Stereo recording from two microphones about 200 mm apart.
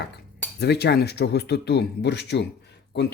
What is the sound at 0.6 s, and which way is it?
Speech, 55° left (ahead or behind).